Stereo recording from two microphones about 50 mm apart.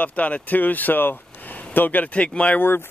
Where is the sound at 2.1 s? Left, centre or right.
Left.